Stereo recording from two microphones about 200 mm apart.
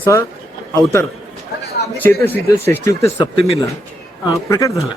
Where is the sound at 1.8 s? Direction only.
55° left (ahead or behind).